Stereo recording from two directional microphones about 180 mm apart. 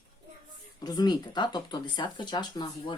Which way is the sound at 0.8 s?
20° left (ahead or behind).